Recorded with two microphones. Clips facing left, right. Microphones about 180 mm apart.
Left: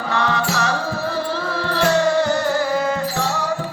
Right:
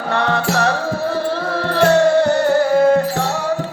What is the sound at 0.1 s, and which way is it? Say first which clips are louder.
Music: right 3 dB; 55° right (ahead or behind).